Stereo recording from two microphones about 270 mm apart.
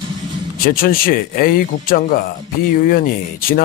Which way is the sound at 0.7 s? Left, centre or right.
Left.